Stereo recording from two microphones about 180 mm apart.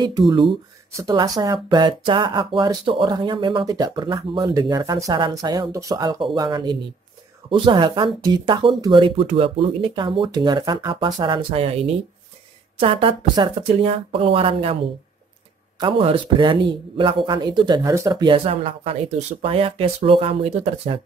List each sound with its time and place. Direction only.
0.3 s speech: 25° right (ahead or behind)
15.8 s speech: 30° right (ahead or behind)